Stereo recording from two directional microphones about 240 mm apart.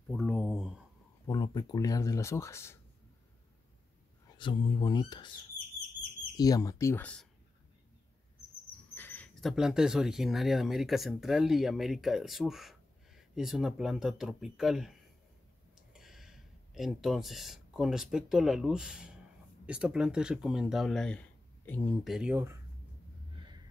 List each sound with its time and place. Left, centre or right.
0.1 s a sound: centre
1.2 s speech: centre
4.4 s speech: left
6.3 s speech: centre
8.9 s speech: centre